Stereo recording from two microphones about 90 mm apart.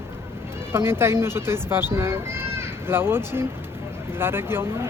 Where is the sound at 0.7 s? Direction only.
25° right (ahead or behind).